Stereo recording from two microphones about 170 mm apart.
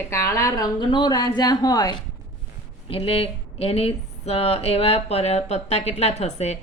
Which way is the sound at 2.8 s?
35° left (ahead or behind).